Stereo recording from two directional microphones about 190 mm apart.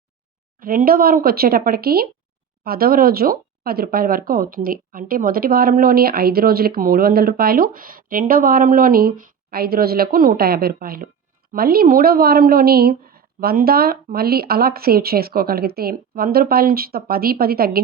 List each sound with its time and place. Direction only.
0.6 s speech: 50° right (ahead or behind)